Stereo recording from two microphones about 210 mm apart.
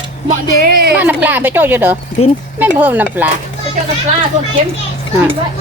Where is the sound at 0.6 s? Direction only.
45° right (ahead or behind).